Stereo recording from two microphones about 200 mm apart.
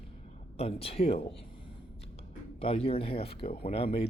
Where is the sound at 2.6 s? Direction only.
30° left (ahead or behind).